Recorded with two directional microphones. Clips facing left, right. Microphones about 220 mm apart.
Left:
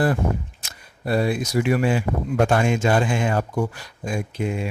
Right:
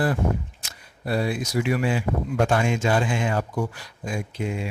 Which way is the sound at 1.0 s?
50° left (ahead or behind).